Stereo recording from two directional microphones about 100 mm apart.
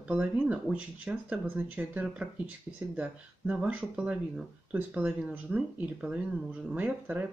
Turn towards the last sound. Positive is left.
turn(degrees=-15)  # may be behind; listen again after turning